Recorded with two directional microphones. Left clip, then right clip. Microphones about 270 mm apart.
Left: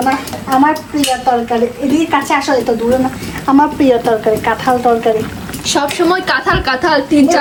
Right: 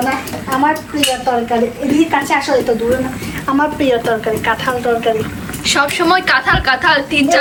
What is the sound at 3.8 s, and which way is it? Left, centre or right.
Speech, left.